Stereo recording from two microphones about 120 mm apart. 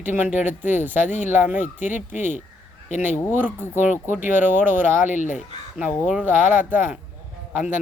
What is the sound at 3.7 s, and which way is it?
Speech, 90° left.